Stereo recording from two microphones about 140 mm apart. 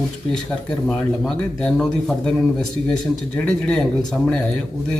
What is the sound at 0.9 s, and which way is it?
A man's voice, 5° left (ahead or behind).